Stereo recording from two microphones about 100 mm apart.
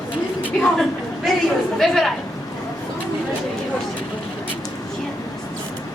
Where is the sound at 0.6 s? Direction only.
5° left (ahead or behind).